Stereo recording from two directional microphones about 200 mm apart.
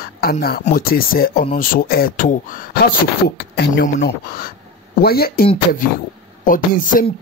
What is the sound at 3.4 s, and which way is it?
Speech, 55° left (ahead or behind).